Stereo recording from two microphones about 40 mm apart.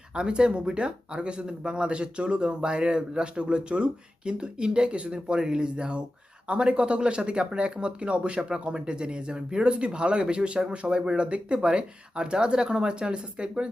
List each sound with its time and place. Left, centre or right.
0.1 s speech: right